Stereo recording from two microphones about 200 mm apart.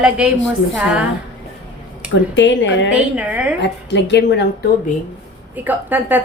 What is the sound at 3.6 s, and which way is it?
Speech, 60° left (ahead or behind).